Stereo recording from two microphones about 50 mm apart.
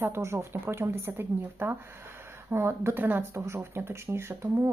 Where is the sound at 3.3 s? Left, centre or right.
Right.